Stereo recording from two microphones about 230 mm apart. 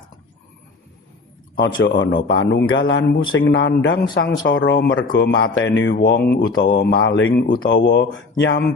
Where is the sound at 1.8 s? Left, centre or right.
Left.